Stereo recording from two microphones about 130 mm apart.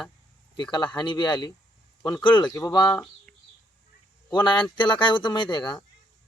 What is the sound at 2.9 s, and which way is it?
Speech, 10° left (ahead or behind).